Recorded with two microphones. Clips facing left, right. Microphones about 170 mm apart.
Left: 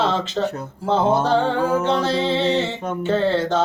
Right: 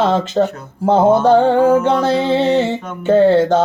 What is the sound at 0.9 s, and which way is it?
Music, 50° right (ahead or behind).